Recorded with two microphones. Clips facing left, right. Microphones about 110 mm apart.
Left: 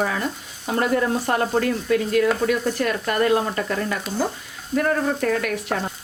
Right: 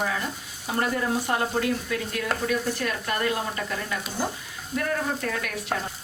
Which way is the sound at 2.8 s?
50° left (ahead or behind).